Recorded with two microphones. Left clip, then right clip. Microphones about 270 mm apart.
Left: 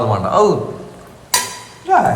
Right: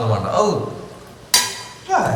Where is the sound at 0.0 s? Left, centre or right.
Centre.